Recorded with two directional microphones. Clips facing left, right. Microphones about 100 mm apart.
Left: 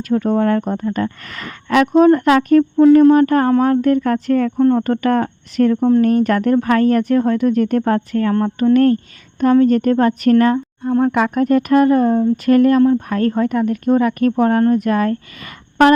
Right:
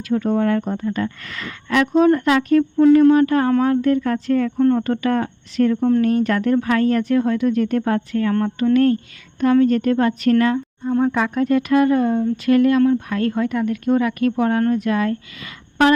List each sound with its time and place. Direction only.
0.0 s speech: 50° left (ahead or behind)
0.9 s speech: 40° left (ahead or behind)
1.7 s speech: 60° left (ahead or behind)
2.0 s speech: 50° left (ahead or behind)
2.8 s speech: 40° left (ahead or behind)
10.8 s speech: 60° left (ahead or behind)
11.4 s a woman's voice: 50° left (ahead or behind)